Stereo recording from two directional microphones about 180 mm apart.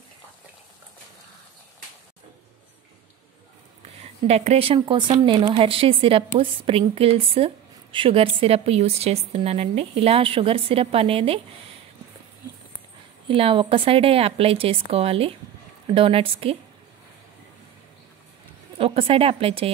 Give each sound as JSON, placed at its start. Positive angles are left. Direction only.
{"t": 4.0, "sound": "speech", "side_deg": -35}
{"t": 13.3, "sound": "speech", "side_deg": -30}
{"t": 18.8, "sound": "speech", "side_deg": -30}